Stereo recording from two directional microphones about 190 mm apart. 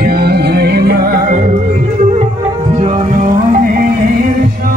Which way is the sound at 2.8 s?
35° right (ahead or behind).